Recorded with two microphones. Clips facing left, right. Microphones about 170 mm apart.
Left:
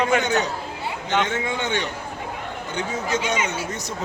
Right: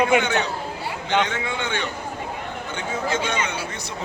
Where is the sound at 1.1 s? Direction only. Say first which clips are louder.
Even; 45° left (ahead or behind).